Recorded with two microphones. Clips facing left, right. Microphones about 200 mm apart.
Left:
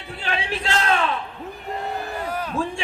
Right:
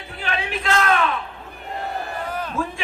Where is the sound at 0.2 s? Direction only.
30° left (ahead or behind).